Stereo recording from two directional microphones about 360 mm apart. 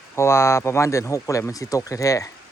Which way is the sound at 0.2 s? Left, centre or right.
Centre.